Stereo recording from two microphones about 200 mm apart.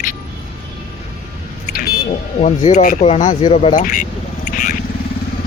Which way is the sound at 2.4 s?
35° left (ahead or behind).